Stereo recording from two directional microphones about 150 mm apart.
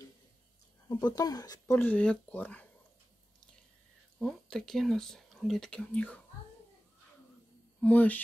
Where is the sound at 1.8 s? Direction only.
10° left (ahead or behind).